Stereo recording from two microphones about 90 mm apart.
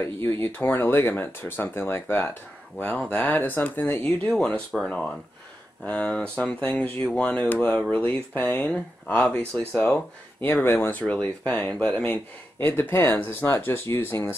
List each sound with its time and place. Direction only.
0.0 s speech: 25° left (ahead or behind)
9.7 s speech: 5° left (ahead or behind)
10.4 s speech: 25° left (ahead or behind)